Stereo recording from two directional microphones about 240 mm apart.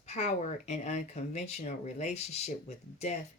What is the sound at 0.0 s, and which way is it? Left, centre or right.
Speech, left.